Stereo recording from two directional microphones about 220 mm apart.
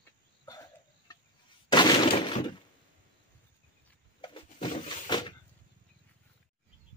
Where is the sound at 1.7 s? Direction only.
20° left (ahead or behind).